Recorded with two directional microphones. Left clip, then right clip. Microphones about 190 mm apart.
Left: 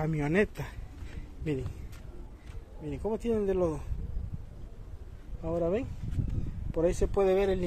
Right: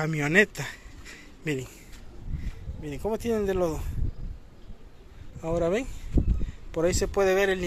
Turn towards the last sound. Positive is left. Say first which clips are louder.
# right 3 dB
turn(degrees=0)  # may be behind; listen again after turning